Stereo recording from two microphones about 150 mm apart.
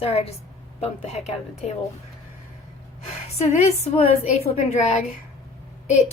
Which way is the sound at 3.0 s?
45° left (ahead or behind).